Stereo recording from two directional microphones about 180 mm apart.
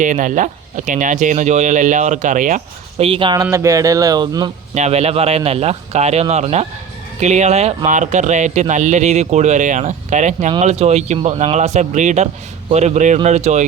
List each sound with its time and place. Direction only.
0.0 s speech: 45° right (ahead or behind)
3.0 s speech: 30° right (ahead or behind)
3.4 s speech: 15° right (ahead or behind)
4.7 s speech: 40° right (ahead or behind)